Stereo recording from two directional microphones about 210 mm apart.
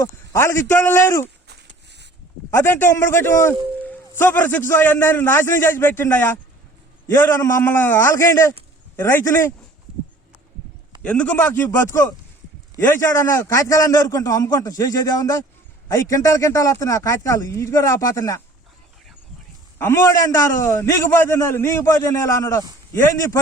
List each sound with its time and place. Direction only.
0.0 s a man's voice: 10° left (ahead or behind)
1.5 s a sound: 55° right (ahead or behind)
2.5 s a man's voice: 10° left (ahead or behind)
11.0 s a man's voice: 5° left (ahead or behind)
19.8 s a man's voice: 10° left (ahead or behind)